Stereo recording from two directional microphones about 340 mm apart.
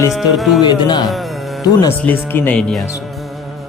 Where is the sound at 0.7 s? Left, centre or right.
Centre.